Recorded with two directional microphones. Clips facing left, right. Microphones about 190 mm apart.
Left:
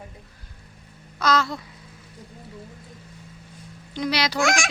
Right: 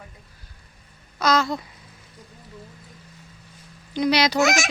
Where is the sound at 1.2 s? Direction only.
15° right (ahead or behind).